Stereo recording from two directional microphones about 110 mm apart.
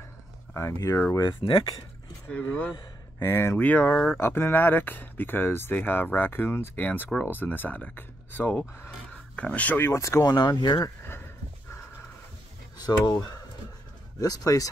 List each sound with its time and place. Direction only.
0.6 s speech: 25° left (ahead or behind)
2.3 s speech: 15° left (ahead or behind)
10.6 s speech: 40° left (ahead or behind)
12.7 s speech: 35° left (ahead or behind)